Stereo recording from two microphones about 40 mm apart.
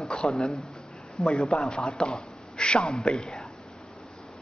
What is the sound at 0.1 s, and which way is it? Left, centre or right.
A man's voice, centre.